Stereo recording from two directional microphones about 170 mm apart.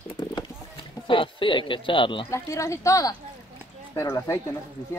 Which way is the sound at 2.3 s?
15° left (ahead or behind).